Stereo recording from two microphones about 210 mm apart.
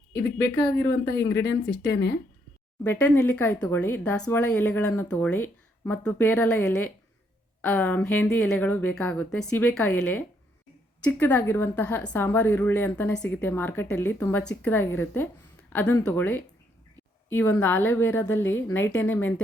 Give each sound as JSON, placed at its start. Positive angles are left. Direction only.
{"t": 0.1, "sound": "a woman's voice", "side_deg": 15}
{"t": 1.6, "sound": "speech", "side_deg": 55}
{"t": 2.8, "sound": "a woman's voice", "side_deg": 10}